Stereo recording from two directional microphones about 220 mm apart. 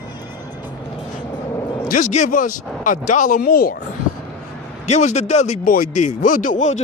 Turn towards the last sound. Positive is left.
turn(degrees=35)  # may be behind; listen again after turning